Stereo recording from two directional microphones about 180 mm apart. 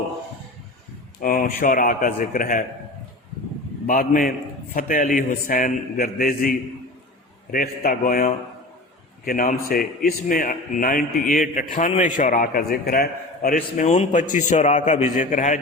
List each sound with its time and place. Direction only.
1.2 s a man's voice: 50° left (ahead or behind)
3.8 s a man's voice: 50° left (ahead or behind)